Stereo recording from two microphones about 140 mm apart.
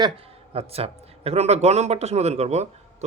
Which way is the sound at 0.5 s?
45° right (ahead or behind).